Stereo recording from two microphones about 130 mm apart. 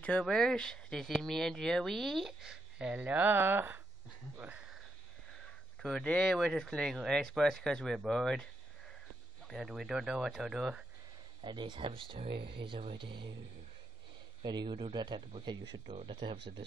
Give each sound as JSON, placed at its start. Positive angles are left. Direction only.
{"t": 0.0, "sound": "speech", "side_deg": 5}
{"t": 5.8, "sound": "speech", "side_deg": 5}
{"t": 9.5, "sound": "speech", "side_deg": 0}
{"t": 11.4, "sound": "speech", "side_deg": -35}
{"t": 14.4, "sound": "speech", "side_deg": -35}